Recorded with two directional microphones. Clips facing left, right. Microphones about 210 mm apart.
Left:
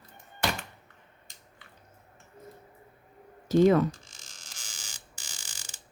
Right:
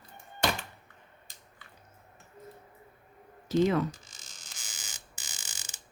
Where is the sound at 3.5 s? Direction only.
45° left (ahead or behind).